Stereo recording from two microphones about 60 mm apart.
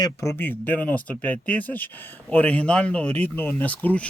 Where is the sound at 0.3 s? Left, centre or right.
Left.